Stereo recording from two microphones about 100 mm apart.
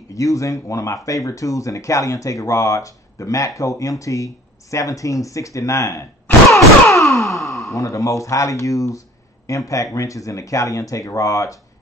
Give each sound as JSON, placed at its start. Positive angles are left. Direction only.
{"t": 0.1, "sound": "speech", "side_deg": 35}
{"t": 6.9, "sound": "a sound", "side_deg": 30}
{"t": 7.2, "sound": "sigh", "side_deg": 0}
{"t": 7.7, "sound": "speech", "side_deg": 30}